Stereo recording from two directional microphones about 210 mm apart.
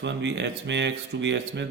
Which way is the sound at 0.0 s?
55° right (ahead or behind).